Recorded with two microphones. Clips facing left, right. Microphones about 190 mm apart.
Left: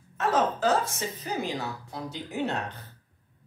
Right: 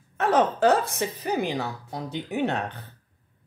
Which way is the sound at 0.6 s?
60° right (ahead or behind).